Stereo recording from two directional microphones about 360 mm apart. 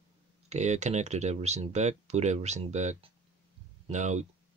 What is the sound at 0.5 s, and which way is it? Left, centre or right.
Speech, centre.